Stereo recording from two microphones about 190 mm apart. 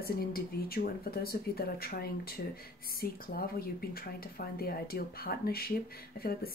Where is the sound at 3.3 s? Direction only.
50° left (ahead or behind).